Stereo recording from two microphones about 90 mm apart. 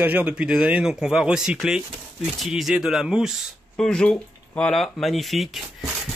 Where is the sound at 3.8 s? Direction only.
10° left (ahead or behind).